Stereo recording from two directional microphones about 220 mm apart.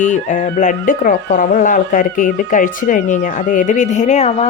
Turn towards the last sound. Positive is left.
turn(degrees=30)  # may be behind; listen again after turning